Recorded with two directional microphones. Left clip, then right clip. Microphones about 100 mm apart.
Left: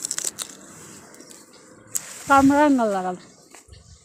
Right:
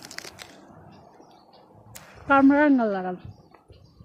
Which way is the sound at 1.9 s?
10° left (ahead or behind).